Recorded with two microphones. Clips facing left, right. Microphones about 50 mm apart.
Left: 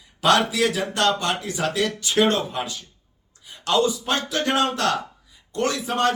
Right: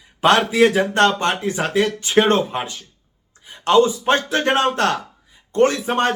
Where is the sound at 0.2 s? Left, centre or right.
Right.